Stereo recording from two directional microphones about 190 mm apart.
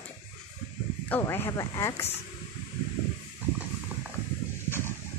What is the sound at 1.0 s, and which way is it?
Speech, 10° left (ahead or behind).